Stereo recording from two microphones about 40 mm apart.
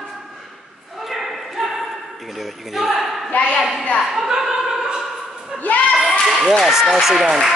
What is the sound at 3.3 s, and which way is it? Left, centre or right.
Speech, left.